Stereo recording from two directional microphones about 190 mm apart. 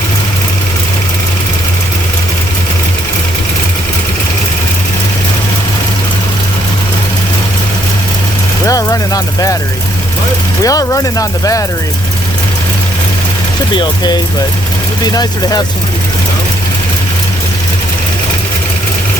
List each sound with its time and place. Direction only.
8.6 s vehicle: 20° left (ahead or behind)
10.6 s speech: 20° left (ahead or behind)
13.7 s speech: 20° left (ahead or behind)